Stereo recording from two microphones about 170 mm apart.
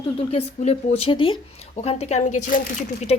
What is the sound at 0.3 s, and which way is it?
Speech, 40° left (ahead or behind).